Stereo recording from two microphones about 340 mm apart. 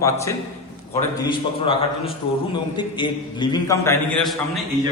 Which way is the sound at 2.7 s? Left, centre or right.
Centre.